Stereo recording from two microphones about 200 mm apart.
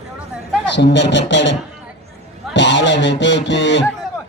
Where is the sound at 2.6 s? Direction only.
65° left (ahead or behind).